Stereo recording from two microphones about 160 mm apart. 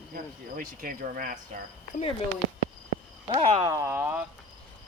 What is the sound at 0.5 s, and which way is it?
Speech, 60° right (ahead or behind).